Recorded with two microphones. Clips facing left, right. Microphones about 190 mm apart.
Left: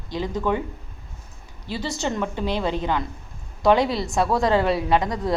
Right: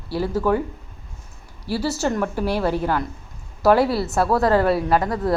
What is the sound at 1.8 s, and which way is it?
Speech, 10° right (ahead or behind).